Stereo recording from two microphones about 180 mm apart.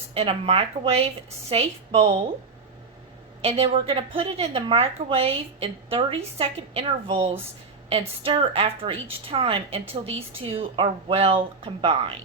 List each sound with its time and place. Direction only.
0.1 s a woman's voice: 35° right (ahead or behind)
3.4 s a woman's voice: 35° right (ahead or behind)